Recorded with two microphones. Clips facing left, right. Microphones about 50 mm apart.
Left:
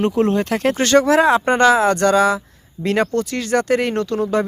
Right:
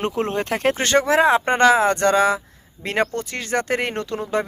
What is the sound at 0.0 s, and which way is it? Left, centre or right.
Speech, right.